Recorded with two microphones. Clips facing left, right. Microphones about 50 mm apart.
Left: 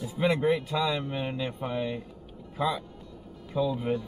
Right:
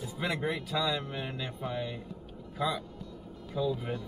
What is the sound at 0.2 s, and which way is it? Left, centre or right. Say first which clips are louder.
Speech: left 8 dB; left.